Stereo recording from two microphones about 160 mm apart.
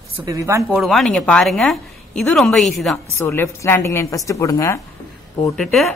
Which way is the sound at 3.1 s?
15° left (ahead or behind).